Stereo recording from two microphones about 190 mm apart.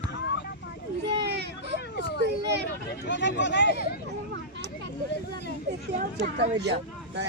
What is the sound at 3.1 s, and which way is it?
Speech, 70° left (ahead or behind).